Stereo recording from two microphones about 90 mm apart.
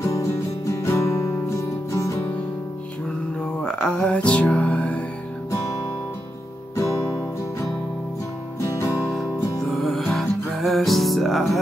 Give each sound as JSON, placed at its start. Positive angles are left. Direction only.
{"t": 0.0, "sound": "music", "side_deg": 35}
{"t": 3.6, "sound": "music", "side_deg": 10}
{"t": 6.7, "sound": "music", "side_deg": 35}
{"t": 8.6, "sound": "music", "side_deg": 35}
{"t": 9.8, "sound": "music", "side_deg": 0}